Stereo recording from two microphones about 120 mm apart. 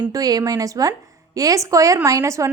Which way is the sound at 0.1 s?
30° right (ahead or behind).